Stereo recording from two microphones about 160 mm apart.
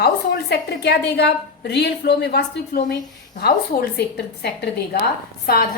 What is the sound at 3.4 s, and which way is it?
A woman's voice, 80° left.